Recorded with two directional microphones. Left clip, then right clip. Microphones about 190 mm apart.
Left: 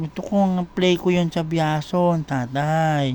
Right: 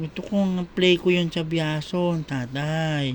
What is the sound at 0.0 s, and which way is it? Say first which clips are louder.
A man's voice: left 5 dB; 25° left (ahead or behind).